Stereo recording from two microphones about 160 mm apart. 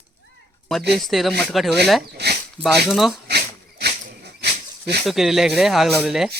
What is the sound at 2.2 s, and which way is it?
Speech, 90° right.